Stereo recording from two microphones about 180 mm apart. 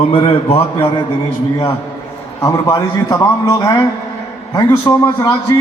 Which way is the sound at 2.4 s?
20° left (ahead or behind).